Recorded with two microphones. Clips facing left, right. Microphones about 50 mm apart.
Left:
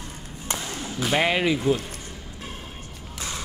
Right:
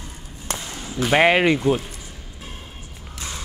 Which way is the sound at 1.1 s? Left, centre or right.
Right.